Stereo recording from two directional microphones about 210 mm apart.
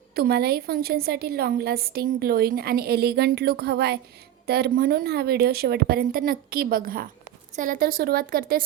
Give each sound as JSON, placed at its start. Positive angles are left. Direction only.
{"t": 0.1, "sound": "a woman's voice", "side_deg": -50}